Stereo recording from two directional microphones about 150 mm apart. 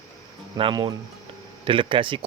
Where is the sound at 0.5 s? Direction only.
35° right (ahead or behind).